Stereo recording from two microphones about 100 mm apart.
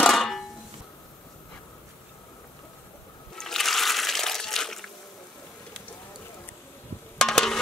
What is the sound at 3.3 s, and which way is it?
Water, 5° left (ahead or behind).